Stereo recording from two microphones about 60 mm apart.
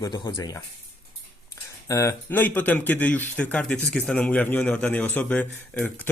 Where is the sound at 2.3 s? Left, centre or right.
Left.